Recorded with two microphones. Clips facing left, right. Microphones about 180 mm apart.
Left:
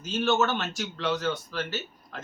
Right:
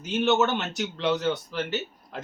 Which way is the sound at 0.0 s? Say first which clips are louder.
Right 2 dB; 20° right (ahead or behind).